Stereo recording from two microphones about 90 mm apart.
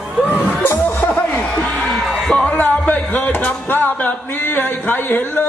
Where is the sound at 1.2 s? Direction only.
10° left (ahead or behind).